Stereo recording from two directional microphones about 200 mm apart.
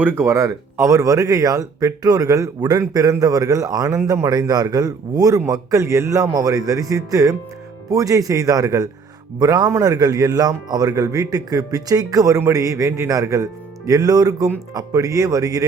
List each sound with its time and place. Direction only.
0.0 s speech: 15° right (ahead or behind)